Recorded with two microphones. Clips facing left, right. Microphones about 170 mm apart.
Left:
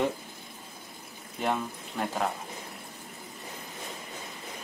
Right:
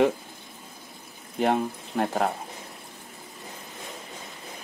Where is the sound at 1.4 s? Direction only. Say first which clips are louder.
Right 6 dB; 55° right (ahead or behind).